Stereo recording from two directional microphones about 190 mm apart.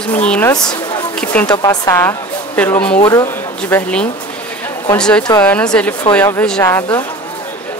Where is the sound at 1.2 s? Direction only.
5° left (ahead or behind).